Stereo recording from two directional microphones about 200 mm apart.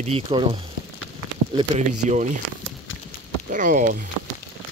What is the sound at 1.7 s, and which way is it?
Speech, 35° right (ahead or behind).